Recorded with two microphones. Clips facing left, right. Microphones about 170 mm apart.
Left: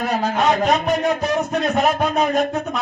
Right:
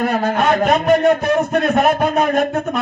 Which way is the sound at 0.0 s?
55° right (ahead or behind).